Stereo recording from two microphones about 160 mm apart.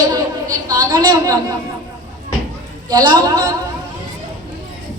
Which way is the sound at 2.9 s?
25° right (ahead or behind).